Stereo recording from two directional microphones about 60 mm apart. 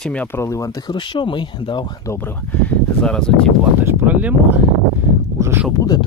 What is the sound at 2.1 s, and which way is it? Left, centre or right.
Speech, left.